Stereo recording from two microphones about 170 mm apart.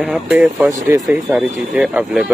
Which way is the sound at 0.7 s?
20° right (ahead or behind).